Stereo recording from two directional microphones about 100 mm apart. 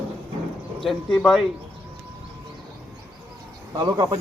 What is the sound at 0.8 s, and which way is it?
Speech, 5° left (ahead or behind).